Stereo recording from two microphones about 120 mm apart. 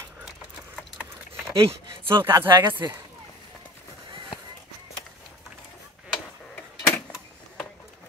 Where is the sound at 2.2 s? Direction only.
20° right (ahead or behind).